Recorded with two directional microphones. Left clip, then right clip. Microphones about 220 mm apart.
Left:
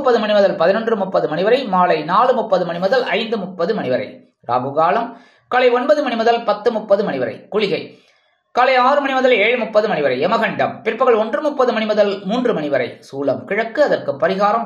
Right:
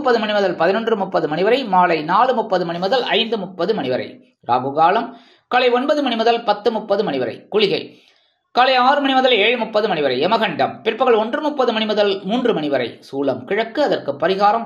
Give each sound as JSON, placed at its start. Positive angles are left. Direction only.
{"t": 0.0, "sound": "speech", "side_deg": -25}